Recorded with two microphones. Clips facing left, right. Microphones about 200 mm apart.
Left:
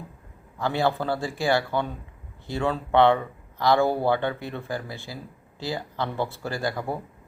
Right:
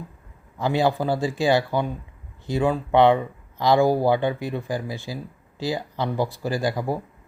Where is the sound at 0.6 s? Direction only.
15° right (ahead or behind).